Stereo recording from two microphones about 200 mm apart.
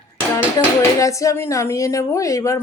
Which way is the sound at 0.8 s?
15° left (ahead or behind).